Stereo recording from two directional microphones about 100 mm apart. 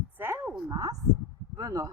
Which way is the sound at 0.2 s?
20° right (ahead or behind).